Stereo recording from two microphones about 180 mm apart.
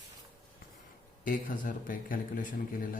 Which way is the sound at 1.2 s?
50° left (ahead or behind).